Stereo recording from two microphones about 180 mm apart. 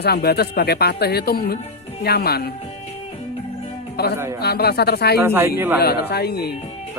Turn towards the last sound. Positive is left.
turn(degrees=60)  # may be behind; listen again after turning